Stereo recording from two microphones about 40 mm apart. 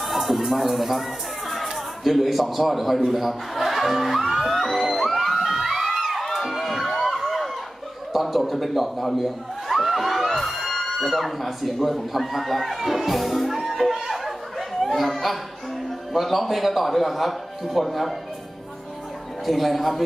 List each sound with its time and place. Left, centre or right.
0.0 s a man's voice: centre
3.1 s music: centre
6.2 s music: centre
7.1 s a sound: centre
16.1 s a man's voice: centre
19.4 s a man's voice: centre